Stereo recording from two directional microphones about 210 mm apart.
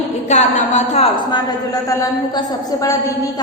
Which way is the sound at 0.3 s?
35° left (ahead or behind).